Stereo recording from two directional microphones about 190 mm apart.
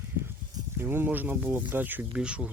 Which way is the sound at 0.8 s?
10° right (ahead or behind).